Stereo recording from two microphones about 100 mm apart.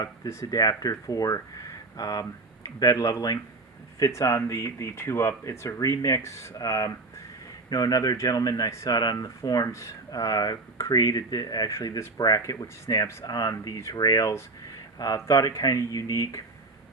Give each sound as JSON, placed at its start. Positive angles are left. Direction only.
{"t": 0.5, "sound": "speech", "side_deg": 40}
{"t": 6.6, "sound": "speech", "side_deg": 40}